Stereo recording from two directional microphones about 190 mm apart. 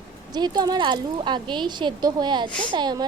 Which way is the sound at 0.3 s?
20° right (ahead or behind).